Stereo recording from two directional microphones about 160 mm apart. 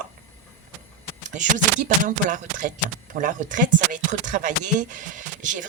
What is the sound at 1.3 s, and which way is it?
Speech, 50° right (ahead or behind).